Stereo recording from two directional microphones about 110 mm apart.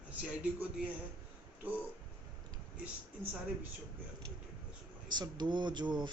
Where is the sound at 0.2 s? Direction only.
15° right (ahead or behind).